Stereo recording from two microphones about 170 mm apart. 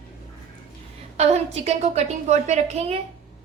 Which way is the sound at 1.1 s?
40° right (ahead or behind).